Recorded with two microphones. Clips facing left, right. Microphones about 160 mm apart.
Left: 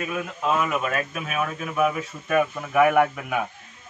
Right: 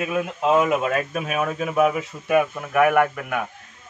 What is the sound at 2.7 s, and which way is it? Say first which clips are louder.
Speech: right 1 dB; centre (ahead or behind).